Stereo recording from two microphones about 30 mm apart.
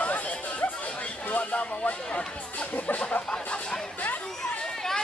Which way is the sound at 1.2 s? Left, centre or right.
Left.